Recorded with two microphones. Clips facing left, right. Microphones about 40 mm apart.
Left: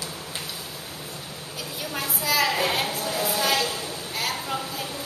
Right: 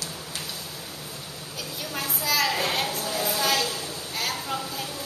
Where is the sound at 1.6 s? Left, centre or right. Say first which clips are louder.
Left 1 dB; centre.